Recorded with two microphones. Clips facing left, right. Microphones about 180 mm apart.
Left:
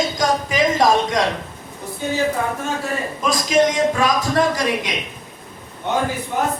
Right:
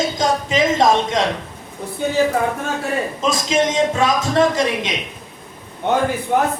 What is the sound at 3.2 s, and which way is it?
Speech, 25° right (ahead or behind).